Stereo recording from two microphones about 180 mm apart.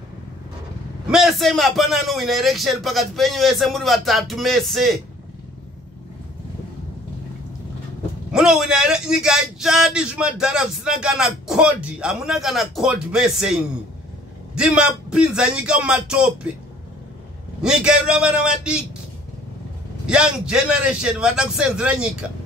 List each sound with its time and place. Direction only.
1.0 s a man's voice: 5° right (ahead or behind)
8.3 s a man's voice: 5° right (ahead or behind)
17.6 s a man's voice: 5° right (ahead or behind)
20.1 s a man's voice: 5° right (ahead or behind)